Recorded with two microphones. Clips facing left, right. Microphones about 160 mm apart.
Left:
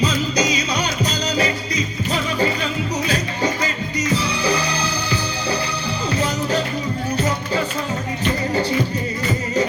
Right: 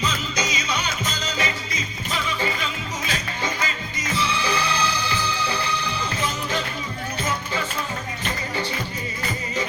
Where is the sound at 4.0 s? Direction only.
40° left (ahead or behind).